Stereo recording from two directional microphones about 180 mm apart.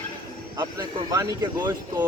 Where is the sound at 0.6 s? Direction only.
20° right (ahead or behind).